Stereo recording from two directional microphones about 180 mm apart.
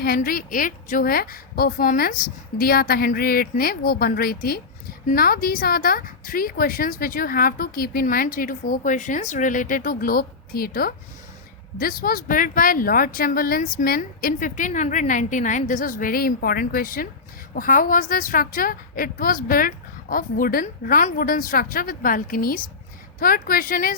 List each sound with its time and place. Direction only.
0.0 s a woman's voice: 55° left (ahead or behind)